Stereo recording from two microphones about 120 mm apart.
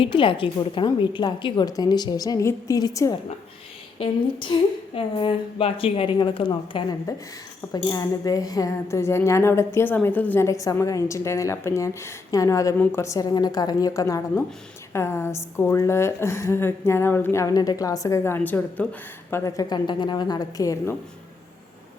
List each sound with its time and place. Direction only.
0.0 s a woman's voice: 45° left (ahead or behind)
3.9 s a woman's voice: 45° left (ahead or behind)
7.1 s a woman's voice: 30° left (ahead or behind)
12.7 s a woman's voice: 15° left (ahead or behind)
19.3 s a woman's voice: 30° left (ahead or behind)